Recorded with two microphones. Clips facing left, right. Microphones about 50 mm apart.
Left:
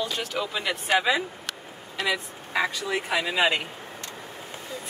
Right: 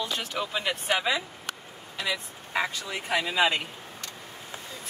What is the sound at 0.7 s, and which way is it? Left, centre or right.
Speech, left.